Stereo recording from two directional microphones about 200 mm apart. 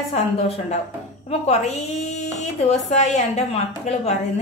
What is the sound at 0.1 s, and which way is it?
A woman's voice, 30° left (ahead or behind).